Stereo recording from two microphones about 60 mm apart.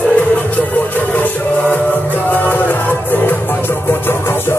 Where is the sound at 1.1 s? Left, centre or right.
Left.